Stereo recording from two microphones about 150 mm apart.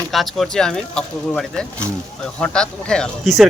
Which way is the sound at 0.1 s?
Centre (ahead or behind).